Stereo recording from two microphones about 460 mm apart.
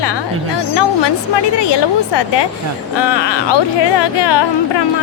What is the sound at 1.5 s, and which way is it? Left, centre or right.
Speech, left.